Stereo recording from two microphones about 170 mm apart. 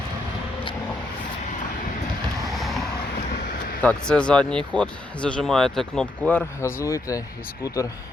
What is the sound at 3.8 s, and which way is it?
Speech, 5° left (ahead or behind).